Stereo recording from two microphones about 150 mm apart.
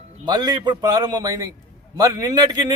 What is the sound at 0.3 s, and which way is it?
A man's voice, 30° right (ahead or behind).